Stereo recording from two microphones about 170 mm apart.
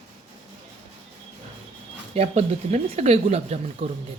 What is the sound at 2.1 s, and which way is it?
A woman's voice, 40° right (ahead or behind).